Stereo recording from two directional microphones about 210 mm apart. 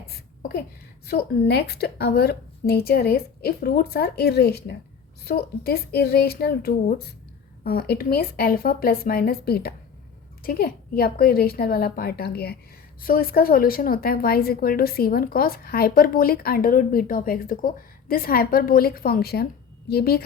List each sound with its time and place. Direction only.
1.0 s a woman's voice: 50° left (ahead or behind)